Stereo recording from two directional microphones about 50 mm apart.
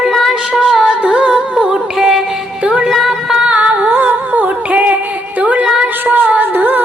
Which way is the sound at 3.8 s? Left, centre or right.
Right.